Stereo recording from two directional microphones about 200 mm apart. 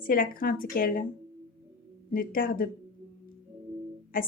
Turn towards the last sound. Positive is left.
turn(degrees=45)  # may be behind; listen again after turning